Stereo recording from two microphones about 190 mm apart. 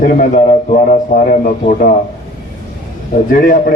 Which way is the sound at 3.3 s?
50° left (ahead or behind).